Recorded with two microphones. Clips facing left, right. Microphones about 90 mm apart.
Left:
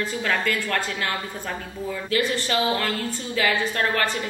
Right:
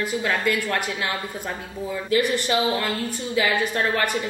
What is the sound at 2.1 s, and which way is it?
Speech, 15° right (ahead or behind).